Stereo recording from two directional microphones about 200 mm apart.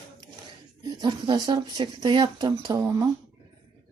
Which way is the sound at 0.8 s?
20° right (ahead or behind).